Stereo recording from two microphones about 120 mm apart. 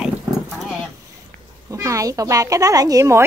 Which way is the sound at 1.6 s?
25° right (ahead or behind).